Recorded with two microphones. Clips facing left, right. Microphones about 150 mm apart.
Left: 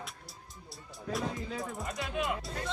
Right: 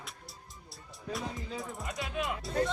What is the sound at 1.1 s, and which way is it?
Speech, centre (ahead or behind).